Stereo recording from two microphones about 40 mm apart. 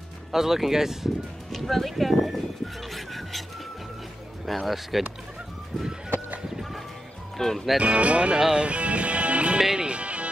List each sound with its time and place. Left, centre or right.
0.3 s speech: centre
1.5 s speech: centre
2.9 s music: centre
4.5 s speech: centre
7.3 s speech: centre
7.8 s speech: right
8.4 s speech: centre
8.6 s music: right